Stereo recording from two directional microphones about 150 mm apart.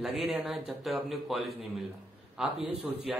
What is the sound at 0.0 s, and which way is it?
A man's voice, centre (ahead or behind).